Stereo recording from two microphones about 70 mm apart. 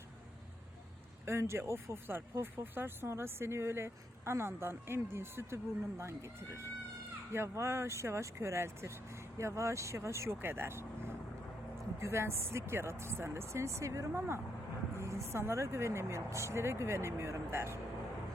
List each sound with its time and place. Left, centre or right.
1.2 s speech: right
14.1 s speech: right